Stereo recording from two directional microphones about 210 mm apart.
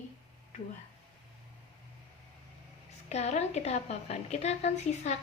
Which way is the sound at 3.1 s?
30° left (ahead or behind).